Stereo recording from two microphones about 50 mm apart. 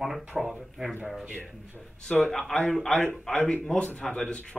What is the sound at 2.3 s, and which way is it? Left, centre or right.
Speech, centre.